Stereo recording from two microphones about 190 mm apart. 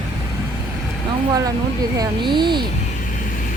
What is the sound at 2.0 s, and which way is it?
Speech, 25° right (ahead or behind).